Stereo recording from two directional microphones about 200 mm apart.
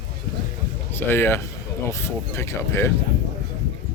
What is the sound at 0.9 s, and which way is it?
Speech, 10° left (ahead or behind).